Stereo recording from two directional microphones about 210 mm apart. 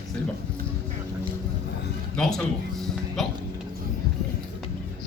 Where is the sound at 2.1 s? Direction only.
5° left (ahead or behind).